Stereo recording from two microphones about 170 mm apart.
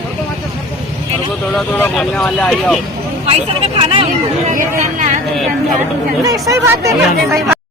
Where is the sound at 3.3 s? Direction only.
35° right (ahead or behind).